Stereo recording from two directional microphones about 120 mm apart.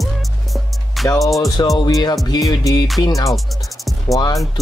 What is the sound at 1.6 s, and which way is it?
Speech, 30° left (ahead or behind).